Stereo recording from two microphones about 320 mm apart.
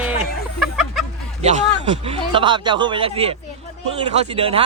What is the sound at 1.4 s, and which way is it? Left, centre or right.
Speech, centre.